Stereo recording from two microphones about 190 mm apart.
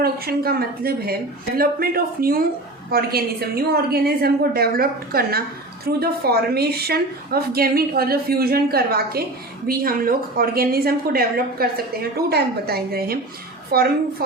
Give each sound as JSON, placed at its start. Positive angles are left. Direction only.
{"t": 0.0, "sound": "a woman's voice", "side_deg": -55}